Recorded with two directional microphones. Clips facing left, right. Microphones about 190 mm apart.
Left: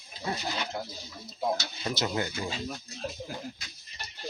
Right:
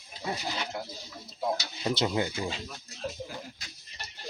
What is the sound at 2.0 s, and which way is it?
Speech, 15° right (ahead or behind).